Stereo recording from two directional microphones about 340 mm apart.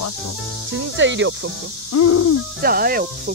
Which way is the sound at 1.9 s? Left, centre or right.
Left.